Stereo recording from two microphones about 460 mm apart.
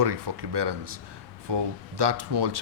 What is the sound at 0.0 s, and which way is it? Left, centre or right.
Speech, right.